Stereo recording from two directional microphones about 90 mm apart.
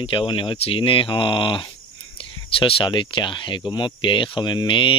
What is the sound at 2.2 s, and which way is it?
Speech, 90° left.